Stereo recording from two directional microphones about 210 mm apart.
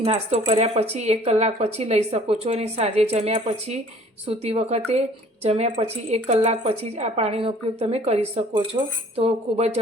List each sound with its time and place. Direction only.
0.0 s speech: 30° right (ahead or behind)